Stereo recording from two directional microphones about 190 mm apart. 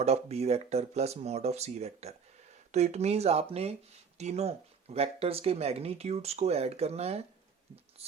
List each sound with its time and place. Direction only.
0.0 s speech: 35° right (ahead or behind)